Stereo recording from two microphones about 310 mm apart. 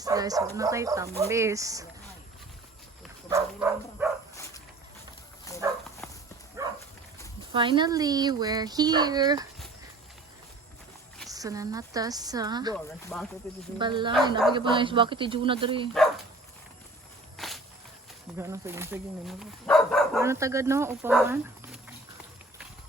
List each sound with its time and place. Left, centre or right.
0.0 s speech: centre
3.2 s dog: centre
5.5 s dog: centre
6.0 s clip-clop: centre
6.6 s a sound: centre
7.5 s speech: centre
11.3 s speech: centre
13.1 s speech: centre
13.7 s speech: centre
17.3 s walk: centre
18.3 s speech: centre
20.1 s speech: centre